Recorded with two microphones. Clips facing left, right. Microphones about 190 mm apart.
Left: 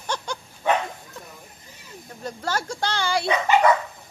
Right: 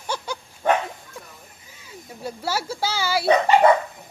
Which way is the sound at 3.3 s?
30° right (ahead or behind).